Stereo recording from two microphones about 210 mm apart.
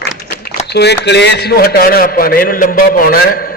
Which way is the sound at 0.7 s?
50° left (ahead or behind).